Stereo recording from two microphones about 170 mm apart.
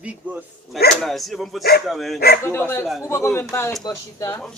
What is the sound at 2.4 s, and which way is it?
Speech, 15° left (ahead or behind).